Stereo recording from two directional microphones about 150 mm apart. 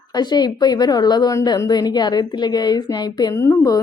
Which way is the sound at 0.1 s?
30° left (ahead or behind).